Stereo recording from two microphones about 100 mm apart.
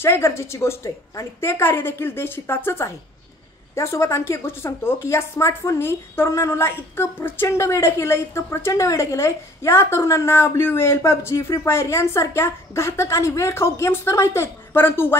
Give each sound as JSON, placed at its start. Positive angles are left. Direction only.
{"t": 0.0, "sound": "speech", "side_deg": 25}